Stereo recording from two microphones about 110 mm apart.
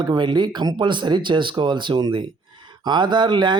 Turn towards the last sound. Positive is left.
turn(degrees=-45)  # may be behind; listen again after turning